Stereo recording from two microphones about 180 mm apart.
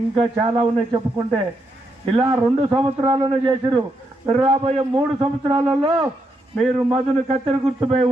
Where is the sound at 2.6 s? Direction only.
25° right (ahead or behind).